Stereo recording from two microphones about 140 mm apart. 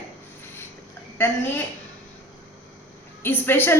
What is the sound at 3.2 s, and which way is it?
Speech, 15° left (ahead or behind).